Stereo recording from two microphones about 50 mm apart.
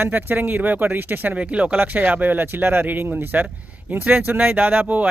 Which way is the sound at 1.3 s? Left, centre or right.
Right.